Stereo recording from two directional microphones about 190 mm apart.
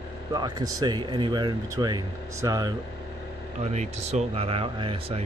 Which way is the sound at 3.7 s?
35° right (ahead or behind).